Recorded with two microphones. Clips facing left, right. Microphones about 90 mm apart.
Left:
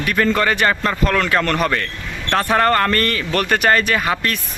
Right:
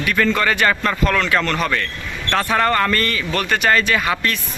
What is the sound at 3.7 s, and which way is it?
Speech, 35° left (ahead or behind).